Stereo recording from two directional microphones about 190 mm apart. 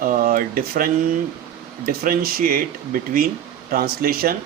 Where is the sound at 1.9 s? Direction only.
50° right (ahead or behind).